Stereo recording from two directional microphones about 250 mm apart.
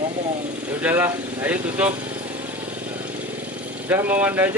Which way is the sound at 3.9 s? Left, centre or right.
Centre.